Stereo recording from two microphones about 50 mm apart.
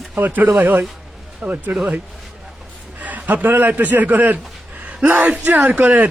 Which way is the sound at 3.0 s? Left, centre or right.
Right.